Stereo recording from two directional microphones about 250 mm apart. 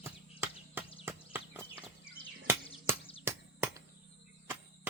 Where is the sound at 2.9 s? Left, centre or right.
Centre.